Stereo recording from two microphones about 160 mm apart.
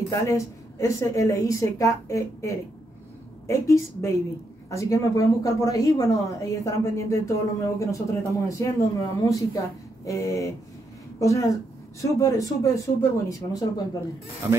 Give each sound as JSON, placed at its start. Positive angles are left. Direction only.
{"t": 0.1, "sound": "a woman's voice", "side_deg": 20}